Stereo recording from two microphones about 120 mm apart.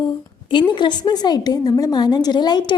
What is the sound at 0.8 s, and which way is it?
A woman's voice, 40° left (ahead or behind).